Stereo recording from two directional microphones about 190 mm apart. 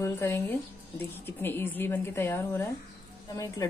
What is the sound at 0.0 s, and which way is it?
A woman's voice, 15° left (ahead or behind).